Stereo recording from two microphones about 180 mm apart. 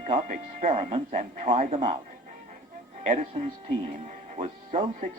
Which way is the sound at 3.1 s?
40° right (ahead or behind).